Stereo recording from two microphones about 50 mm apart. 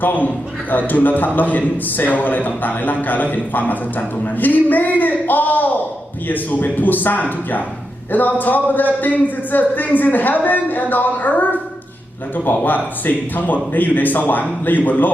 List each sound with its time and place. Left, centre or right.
0.0 s a man's voice: left